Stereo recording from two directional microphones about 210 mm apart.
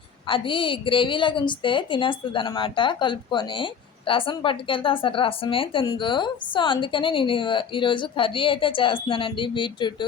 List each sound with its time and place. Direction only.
0.3 s a woman's voice: 25° left (ahead or behind)